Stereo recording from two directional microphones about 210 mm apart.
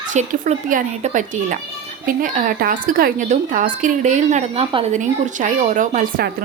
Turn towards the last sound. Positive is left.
turn(degrees=-40)  # may be behind; listen again after turning